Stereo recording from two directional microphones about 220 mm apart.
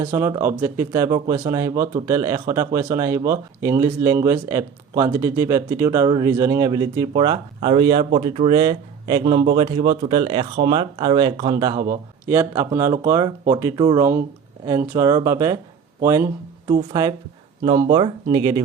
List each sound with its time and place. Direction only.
0.0 s speech: 10° right (ahead or behind)